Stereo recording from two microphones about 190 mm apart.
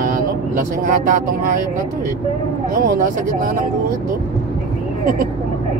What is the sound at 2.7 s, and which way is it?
Speech, 50° right (ahead or behind).